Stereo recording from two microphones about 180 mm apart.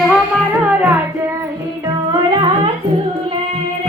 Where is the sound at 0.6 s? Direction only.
10° right (ahead or behind).